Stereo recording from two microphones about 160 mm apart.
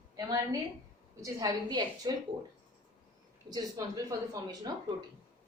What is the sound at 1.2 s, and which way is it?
Speech, 20° right (ahead or behind).